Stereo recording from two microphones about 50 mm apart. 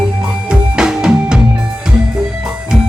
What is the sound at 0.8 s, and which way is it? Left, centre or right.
Music, centre.